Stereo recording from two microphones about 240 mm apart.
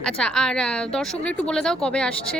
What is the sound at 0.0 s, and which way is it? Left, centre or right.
Speech, centre.